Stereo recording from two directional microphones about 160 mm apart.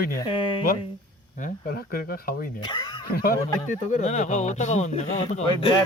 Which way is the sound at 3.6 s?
50° left (ahead or behind).